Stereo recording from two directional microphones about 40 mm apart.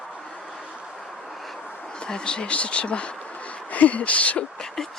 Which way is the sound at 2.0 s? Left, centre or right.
Left.